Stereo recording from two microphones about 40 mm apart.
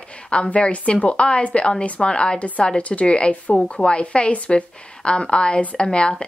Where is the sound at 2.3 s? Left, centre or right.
Left.